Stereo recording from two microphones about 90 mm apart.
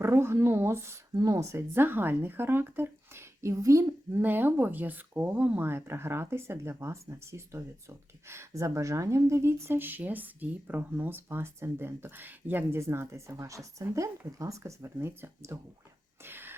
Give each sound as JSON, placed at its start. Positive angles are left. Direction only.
{"t": 0.0, "sound": "speech", "side_deg": -30}
{"t": 4.1, "sound": "speech", "side_deg": -25}
{"t": 16.2, "sound": "gasp", "side_deg": -25}